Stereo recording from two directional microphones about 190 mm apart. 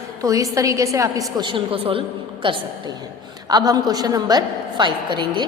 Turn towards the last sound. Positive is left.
turn(degrees=-25)  # may be behind; listen again after turning